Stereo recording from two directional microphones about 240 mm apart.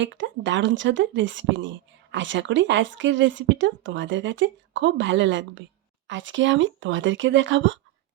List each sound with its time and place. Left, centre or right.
0.0 s a woman's voice: right